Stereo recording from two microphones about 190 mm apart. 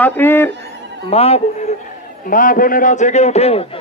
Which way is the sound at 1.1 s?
30° left (ahead or behind).